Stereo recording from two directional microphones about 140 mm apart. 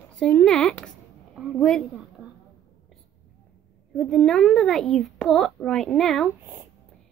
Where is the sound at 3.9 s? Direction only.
Centre (ahead or behind).